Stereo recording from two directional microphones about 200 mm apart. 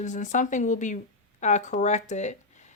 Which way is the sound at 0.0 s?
35° left (ahead or behind).